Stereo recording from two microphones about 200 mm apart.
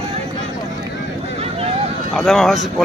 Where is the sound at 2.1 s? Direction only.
Centre (ahead or behind).